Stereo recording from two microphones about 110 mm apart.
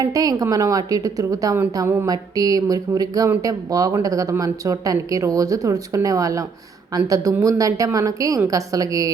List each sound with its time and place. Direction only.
0.0 s speech: 35° right (ahead or behind)